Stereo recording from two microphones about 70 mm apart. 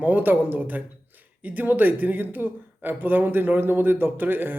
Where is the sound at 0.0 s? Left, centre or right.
Right.